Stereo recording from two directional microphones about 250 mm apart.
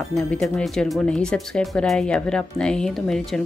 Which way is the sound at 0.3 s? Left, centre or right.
Centre.